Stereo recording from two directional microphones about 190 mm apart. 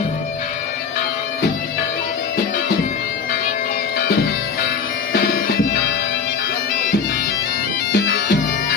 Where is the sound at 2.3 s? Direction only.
50° left (ahead or behind).